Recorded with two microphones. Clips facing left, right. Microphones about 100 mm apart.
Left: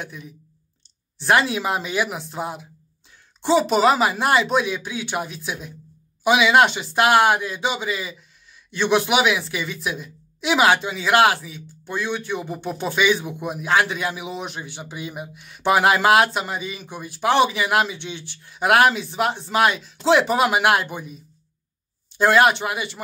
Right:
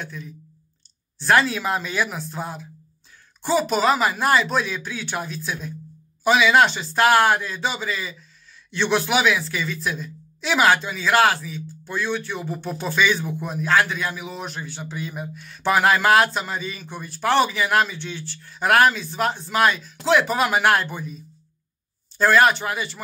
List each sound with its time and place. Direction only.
0.0 s speech: 15° left (ahead or behind)